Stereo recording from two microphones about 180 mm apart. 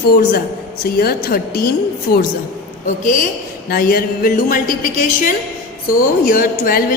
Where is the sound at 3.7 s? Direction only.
55° left (ahead or behind).